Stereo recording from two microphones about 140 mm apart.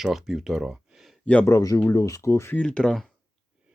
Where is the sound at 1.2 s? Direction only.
10° left (ahead or behind).